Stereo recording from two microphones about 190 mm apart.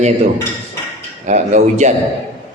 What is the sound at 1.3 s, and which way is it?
Speech, 40° right (ahead or behind).